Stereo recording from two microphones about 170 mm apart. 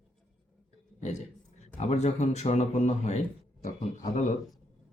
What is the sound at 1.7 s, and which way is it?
Speech, 40° left (ahead or behind).